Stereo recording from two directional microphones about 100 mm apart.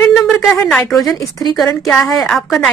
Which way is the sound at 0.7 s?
Centre (ahead or behind).